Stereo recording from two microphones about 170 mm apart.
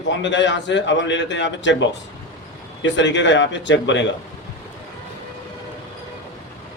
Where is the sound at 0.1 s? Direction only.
90° left.